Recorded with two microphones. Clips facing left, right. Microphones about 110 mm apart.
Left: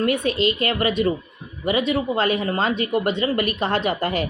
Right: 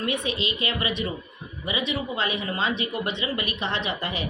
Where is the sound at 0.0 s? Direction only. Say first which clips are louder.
Left 8 dB; 50° left (ahead or behind).